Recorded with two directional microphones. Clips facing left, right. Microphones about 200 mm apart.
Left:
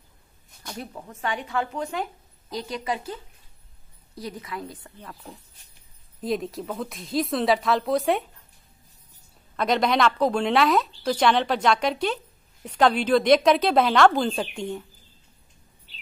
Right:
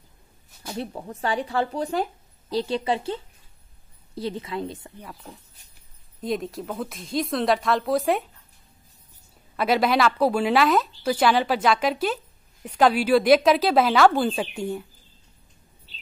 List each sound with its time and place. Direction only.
0.7 s a woman's voice: 30° right (ahead or behind)
4.9 s speech: 10° right (ahead or behind)
9.6 s speech: 5° right (ahead or behind)